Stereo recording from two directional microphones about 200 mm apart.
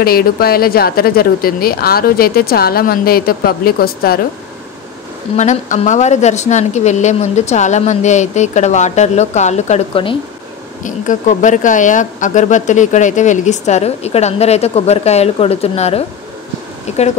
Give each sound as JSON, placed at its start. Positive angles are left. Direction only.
{"t": 0.0, "sound": "speech", "side_deg": 50}
{"t": 5.3, "sound": "speech", "side_deg": 35}